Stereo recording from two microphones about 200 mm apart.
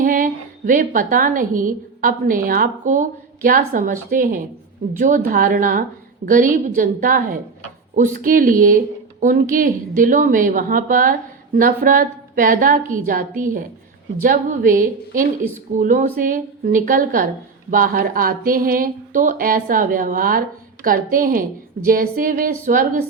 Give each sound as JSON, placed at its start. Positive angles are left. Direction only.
{"t": 0.0, "sound": "a woman's voice", "side_deg": -40}